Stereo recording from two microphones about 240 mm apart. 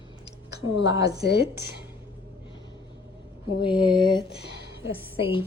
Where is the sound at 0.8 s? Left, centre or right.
Centre.